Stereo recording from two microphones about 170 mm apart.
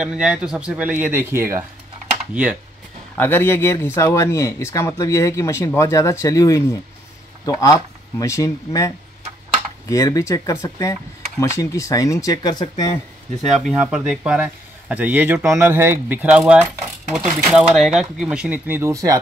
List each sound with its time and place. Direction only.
0.0 s speech: 5° right (ahead or behind)
3.2 s speech: 10° left (ahead or behind)
13.6 s speech: 5° right (ahead or behind); by 19.1 s 20° right (ahead or behind)